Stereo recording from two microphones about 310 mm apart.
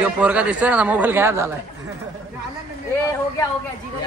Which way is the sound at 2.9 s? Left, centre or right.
Centre.